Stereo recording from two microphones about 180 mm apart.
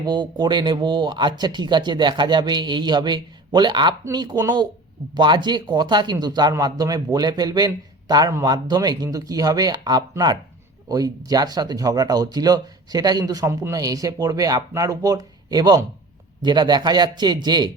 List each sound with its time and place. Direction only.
0.0 s speech: 25° right (ahead or behind)